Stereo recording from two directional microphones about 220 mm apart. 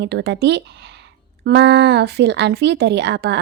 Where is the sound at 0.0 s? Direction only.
50° right (ahead or behind).